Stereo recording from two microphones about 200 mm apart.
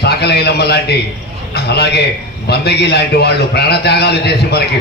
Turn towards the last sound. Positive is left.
turn(degrees=55)  # may be behind; listen again after turning